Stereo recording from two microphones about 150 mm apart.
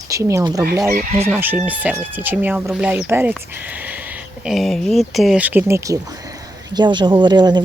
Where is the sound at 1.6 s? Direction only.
10° right (ahead or behind).